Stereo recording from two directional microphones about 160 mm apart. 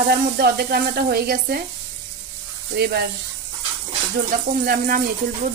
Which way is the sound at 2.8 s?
85° right.